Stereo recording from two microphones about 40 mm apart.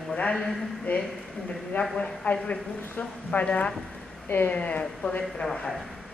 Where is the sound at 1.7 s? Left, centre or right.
Left.